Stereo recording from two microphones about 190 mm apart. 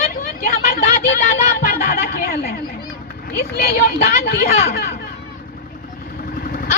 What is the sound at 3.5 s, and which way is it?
Speech, 55° left (ahead or behind).